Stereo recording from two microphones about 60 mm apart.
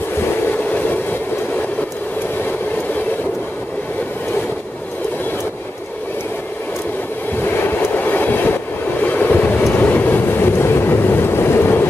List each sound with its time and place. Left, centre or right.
7.6 s train: left